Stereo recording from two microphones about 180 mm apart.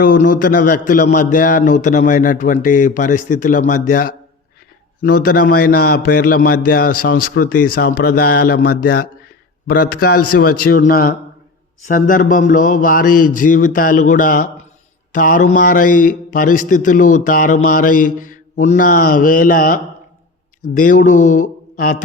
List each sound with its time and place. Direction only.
0.0 s a man's voice: 50° left (ahead or behind)